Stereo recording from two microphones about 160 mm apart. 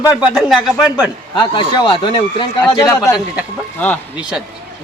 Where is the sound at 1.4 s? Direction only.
30° left (ahead or behind).